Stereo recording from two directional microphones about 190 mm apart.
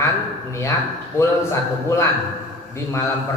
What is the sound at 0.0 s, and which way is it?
A man's voice, 15° left (ahead or behind).